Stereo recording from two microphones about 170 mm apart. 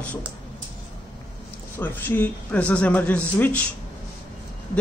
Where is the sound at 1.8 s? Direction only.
10° left (ahead or behind).